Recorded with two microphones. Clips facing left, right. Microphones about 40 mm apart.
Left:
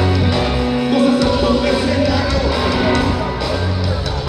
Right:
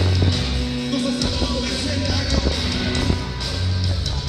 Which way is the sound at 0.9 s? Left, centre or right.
Left.